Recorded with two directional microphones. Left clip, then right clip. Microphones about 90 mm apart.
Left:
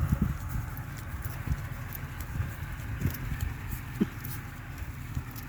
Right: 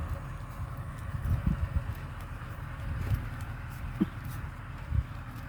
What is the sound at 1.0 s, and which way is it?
Clip-clop, 15° right (ahead or behind).